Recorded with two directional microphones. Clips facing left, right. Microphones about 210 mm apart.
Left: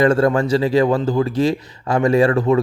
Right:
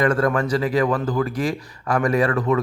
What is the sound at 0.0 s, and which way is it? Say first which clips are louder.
Speech: left 4 dB; 25° left (ahead or behind).